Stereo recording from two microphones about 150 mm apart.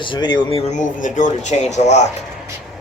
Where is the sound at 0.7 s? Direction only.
55° left (ahead or behind).